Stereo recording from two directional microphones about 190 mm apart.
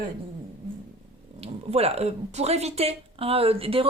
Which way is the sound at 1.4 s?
35° right (ahead or behind).